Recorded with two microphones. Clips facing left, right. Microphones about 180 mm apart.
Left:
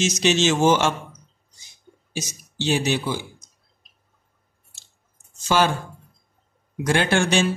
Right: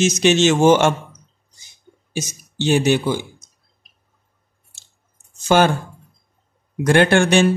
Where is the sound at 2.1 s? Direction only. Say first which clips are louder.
Right 4 dB; 50° right (ahead or behind).